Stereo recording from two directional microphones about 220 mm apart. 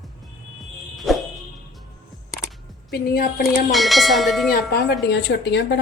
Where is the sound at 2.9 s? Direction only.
45° left (ahead or behind).